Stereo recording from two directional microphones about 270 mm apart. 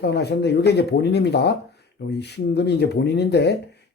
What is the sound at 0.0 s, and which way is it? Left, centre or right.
Speech, left.